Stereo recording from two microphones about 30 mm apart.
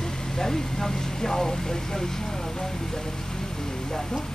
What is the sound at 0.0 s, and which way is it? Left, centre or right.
Speech, left.